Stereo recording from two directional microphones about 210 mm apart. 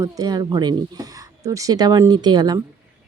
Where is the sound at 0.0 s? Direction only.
15° right (ahead or behind).